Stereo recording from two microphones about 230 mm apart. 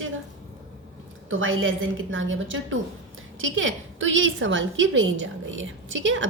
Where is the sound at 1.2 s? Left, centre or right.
Right.